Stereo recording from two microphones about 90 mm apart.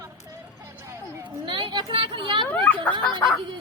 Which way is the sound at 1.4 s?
55° right (ahead or behind).